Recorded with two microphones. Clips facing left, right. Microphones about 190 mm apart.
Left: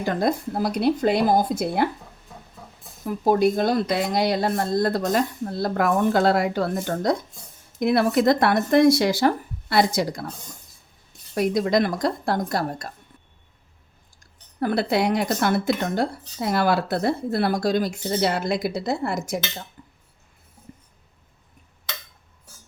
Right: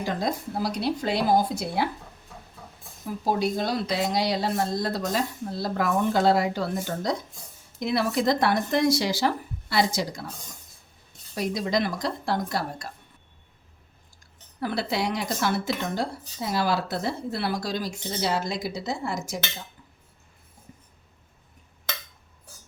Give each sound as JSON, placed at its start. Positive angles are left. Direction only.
{"t": 0.0, "sound": "speech", "side_deg": 55}
{"t": 3.2, "sound": "speech", "side_deg": 55}
{"t": 11.3, "sound": "speech", "side_deg": 55}
{"t": 14.6, "sound": "speech", "side_deg": 50}